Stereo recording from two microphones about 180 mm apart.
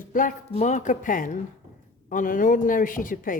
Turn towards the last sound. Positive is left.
turn(degrees=50)  # may be behind; listen again after turning